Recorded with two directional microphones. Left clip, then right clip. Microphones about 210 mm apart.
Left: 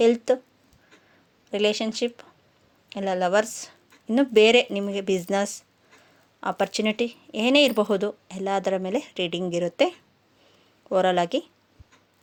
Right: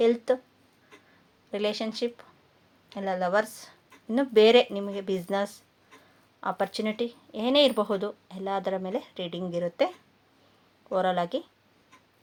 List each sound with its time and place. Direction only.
0.0 s speech: 35° left (ahead or behind)
1.5 s speech: 35° left (ahead or behind)